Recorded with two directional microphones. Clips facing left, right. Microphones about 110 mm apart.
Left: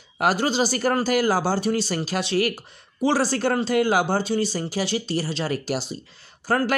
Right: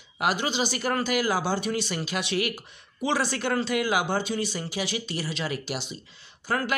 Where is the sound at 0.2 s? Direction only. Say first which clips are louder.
Left 5 dB; 40° left (ahead or behind).